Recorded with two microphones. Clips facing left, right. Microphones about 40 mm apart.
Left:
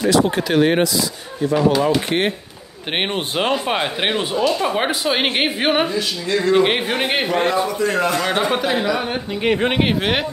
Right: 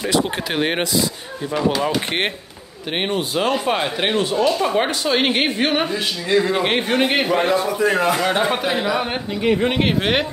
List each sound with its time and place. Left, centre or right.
0.0 s speech: centre
2.9 s speech: left
3.6 s a woman's voice: centre
4.5 s a woman's voice: centre
5.9 s speech: right
6.5 s speech: centre
8.2 s speech: centre
9.8 s speech: centre